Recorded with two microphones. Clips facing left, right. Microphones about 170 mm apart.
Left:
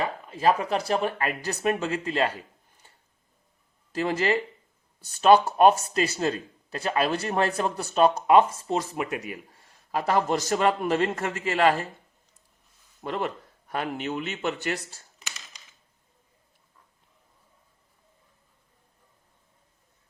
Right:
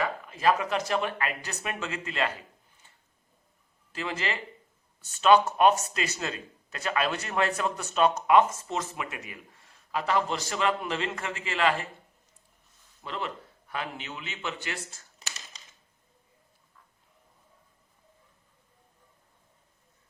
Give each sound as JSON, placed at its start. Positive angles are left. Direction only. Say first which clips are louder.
{"t": 0.0, "sound": "speech", "louder": "left 2 dB", "side_deg": 30}
{"t": 3.9, "sound": "speech", "louder": "left 8 dB", "side_deg": 40}
{"t": 13.0, "sound": "speech", "louder": "left 6 dB", "side_deg": 45}